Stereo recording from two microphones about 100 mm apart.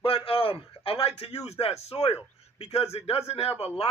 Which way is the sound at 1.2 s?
90° left.